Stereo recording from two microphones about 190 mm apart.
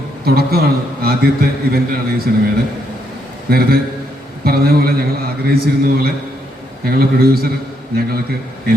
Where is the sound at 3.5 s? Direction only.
55° right (ahead or behind).